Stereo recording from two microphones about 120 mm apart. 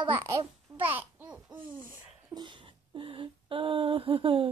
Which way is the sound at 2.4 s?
40° right (ahead or behind).